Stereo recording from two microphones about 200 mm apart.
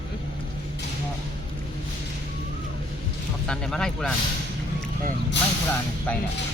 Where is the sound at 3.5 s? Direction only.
5° left (ahead or behind).